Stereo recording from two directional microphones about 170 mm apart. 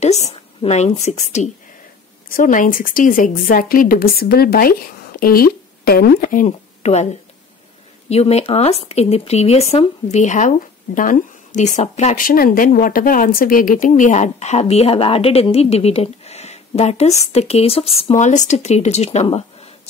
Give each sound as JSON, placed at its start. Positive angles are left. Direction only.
{"t": 0.0, "sound": "a woman's voice", "side_deg": 40}
{"t": 2.2, "sound": "a woman's voice", "side_deg": 55}
{"t": 6.4, "sound": "speech", "side_deg": 40}
{"t": 12.3, "sound": "speech", "side_deg": 55}